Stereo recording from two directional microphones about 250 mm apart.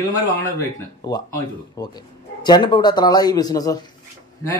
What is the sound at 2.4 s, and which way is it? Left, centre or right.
Speech, centre.